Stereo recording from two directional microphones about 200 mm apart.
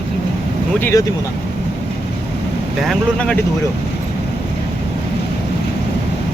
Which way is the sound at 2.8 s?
5° left (ahead or behind).